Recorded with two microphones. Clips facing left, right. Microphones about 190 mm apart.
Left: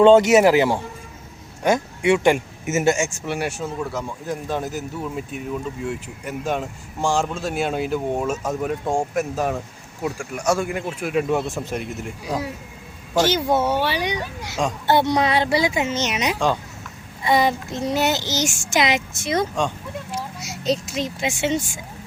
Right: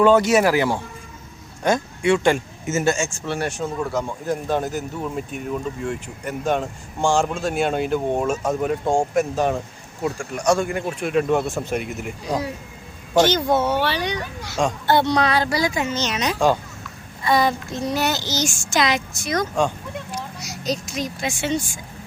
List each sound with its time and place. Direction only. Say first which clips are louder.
0.0 s a child's voice: left 3 dB; 25° left (ahead or behind)